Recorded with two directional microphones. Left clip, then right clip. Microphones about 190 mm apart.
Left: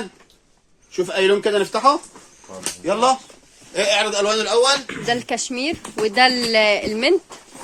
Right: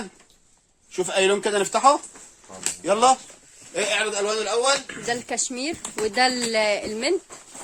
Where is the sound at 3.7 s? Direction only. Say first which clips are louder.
Left 5 dB; 50° right (ahead or behind).